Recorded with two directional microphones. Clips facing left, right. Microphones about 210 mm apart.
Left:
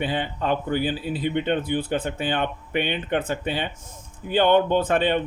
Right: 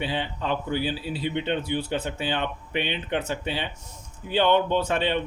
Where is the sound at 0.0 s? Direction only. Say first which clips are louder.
Left 3 dB; 50° left (ahead or behind).